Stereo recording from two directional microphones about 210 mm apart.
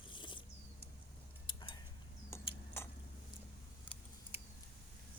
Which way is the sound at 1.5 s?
25° left (ahead or behind).